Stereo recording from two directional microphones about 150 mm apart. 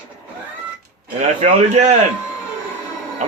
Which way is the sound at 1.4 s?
55° right (ahead or behind).